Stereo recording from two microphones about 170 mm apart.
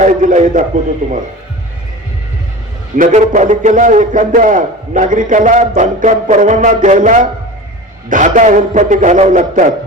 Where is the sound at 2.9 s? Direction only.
50° right (ahead or behind).